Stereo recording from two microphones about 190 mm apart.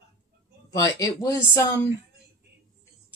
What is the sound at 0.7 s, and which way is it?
Speech, 15° left (ahead or behind).